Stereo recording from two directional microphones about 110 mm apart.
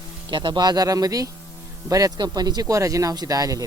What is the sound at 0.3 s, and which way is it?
Speech, 45° right (ahead or behind).